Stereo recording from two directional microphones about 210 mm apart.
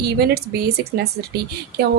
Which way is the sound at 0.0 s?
50° right (ahead or behind).